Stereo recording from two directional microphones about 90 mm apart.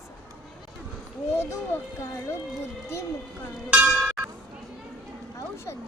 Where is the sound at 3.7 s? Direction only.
15° right (ahead or behind).